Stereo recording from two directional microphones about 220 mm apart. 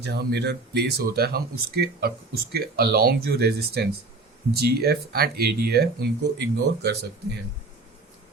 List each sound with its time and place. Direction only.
0.0 s speech: 45° right (ahead or behind)